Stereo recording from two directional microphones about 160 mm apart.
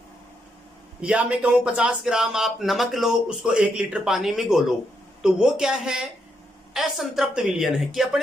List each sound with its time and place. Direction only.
1.0 s speech: 10° right (ahead or behind)